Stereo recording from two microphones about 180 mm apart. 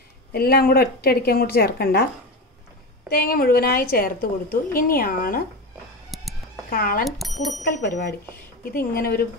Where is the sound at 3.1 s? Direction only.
55° left (ahead or behind).